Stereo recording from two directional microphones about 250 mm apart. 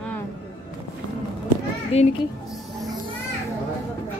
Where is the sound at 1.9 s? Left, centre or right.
Left.